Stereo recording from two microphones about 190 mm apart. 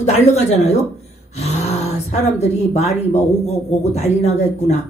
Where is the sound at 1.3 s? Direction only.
35° left (ahead or behind).